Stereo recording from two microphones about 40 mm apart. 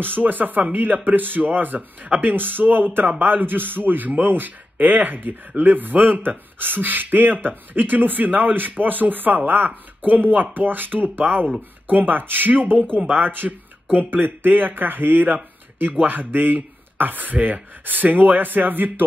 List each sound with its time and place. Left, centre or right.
0.0 s speech: right